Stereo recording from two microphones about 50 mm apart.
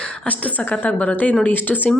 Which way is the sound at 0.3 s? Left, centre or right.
Left.